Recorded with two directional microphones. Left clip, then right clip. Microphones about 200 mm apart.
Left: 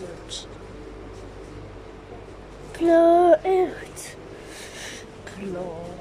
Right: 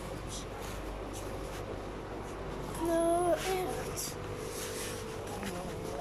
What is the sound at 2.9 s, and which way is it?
Child singing, 45° left (ahead or behind).